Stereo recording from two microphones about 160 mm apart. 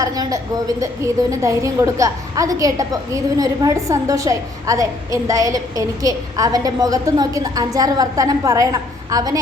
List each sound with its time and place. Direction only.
0.0 s a woman's voice: 20° right (ahead or behind)